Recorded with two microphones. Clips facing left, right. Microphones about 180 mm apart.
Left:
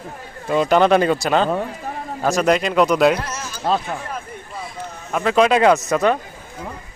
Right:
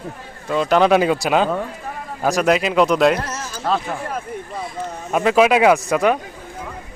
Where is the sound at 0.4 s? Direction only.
5° left (ahead or behind).